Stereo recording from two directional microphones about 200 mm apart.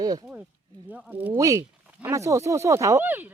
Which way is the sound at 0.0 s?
20° right (ahead or behind).